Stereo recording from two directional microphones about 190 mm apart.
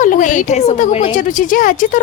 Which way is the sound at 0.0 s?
40° left (ahead or behind).